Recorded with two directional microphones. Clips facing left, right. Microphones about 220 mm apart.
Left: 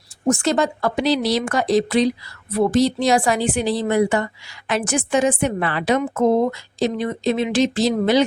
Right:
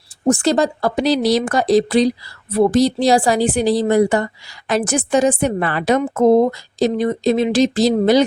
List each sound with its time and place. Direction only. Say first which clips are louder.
0.3 s a woman's voice: right 3 dB; 35° right (ahead or behind)